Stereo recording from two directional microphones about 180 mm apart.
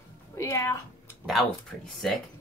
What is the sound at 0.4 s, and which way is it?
Music, 15° left (ahead or behind).